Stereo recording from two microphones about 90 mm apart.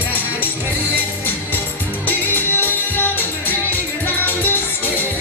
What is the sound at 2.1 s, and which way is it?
Music, 20° left (ahead or behind).